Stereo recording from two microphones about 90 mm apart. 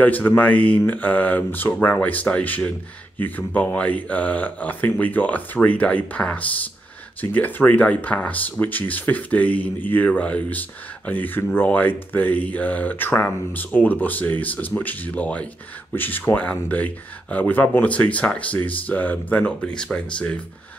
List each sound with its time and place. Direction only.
0.0 s speech: 20° left (ahead or behind)